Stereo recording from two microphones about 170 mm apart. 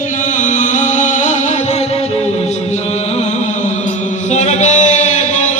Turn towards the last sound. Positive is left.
turn(degrees=45)  # may be behind; listen again after turning